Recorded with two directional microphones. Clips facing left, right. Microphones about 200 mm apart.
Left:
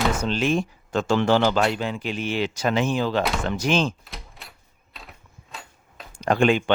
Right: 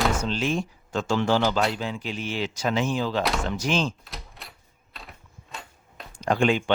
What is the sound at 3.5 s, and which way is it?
Speech, 60° left (ahead or behind).